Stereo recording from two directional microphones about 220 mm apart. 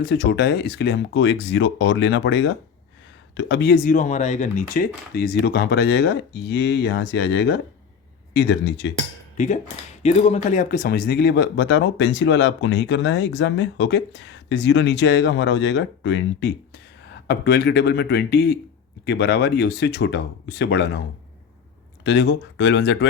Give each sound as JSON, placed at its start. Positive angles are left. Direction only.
{"t": 0.0, "sound": "speech", "side_deg": 50}
{"t": 10.0, "sound": "speech", "side_deg": 30}
{"t": 22.0, "sound": "speech", "side_deg": 50}